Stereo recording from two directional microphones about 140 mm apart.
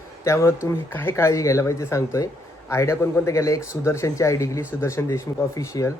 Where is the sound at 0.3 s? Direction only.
20° left (ahead or behind).